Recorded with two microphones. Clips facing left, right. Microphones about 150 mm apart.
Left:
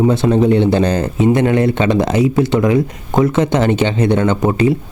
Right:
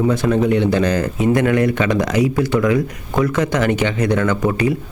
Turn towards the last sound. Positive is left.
turn(degrees=25)  # may be behind; listen again after turning